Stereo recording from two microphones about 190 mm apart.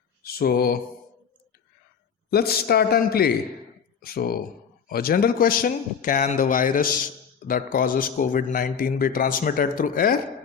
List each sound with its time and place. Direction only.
0.2 s mantra: 55° left (ahead or behind)
2.3 s a man's voice: 55° left (ahead or behind)